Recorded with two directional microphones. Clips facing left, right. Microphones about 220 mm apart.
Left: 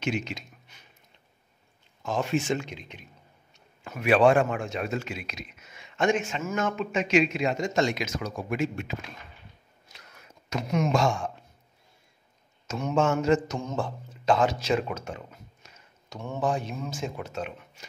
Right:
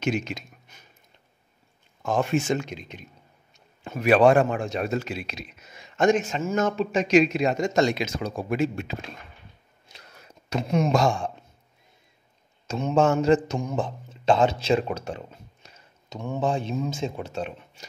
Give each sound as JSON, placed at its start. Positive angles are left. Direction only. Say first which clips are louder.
{"t": 0.0, "sound": "a sound", "louder": "right 3 dB", "side_deg": -45}
{"t": 2.0, "sound": "speech", "louder": "right 3 dB", "side_deg": -50}
{"t": 4.0, "sound": "a man's voice", "louder": "right 3 dB", "side_deg": -40}
{"t": 9.9, "sound": "a sound", "louder": "right 3 dB", "side_deg": -35}
{"t": 12.6, "sound": "a man's voice", "louder": "right 4 dB", "side_deg": -30}
{"t": 13.6, "sound": "speech", "louder": "right 3 dB", "side_deg": -15}
{"t": 16.1, "sound": "speech", "louder": "right 2 dB", "side_deg": -20}